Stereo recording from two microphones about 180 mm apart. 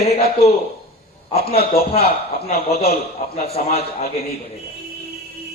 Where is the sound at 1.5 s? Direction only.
55° left (ahead or behind).